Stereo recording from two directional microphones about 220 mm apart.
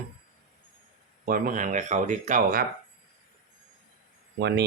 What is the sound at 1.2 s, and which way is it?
Speech, 40° right (ahead or behind).